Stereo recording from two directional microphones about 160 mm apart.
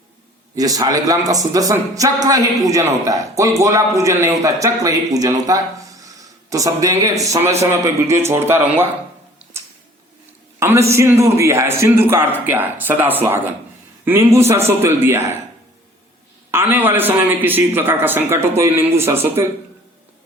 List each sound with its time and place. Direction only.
0.5 s a man's voice: 20° right (ahead or behind)
10.6 s a man's voice: 15° right (ahead or behind)
16.5 s a man's voice: 15° right (ahead or behind)